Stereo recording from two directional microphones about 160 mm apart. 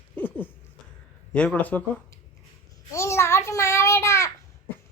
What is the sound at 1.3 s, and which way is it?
Speech, 5° left (ahead or behind).